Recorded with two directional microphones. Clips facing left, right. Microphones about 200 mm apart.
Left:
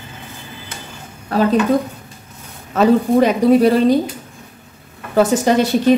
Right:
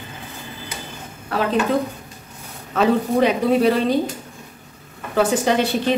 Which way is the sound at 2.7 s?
45° left (ahead or behind).